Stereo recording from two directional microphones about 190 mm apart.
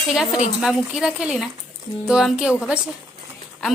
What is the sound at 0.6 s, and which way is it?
A woman's voice, 5° right (ahead or behind).